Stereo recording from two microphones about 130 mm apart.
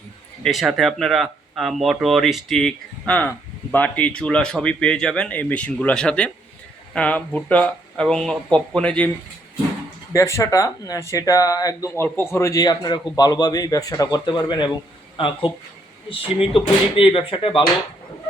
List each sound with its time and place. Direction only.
0.4 s speech: centre (ahead or behind)
10.1 s a man's voice: 20° left (ahead or behind); by 17.6 s 40° left (ahead or behind)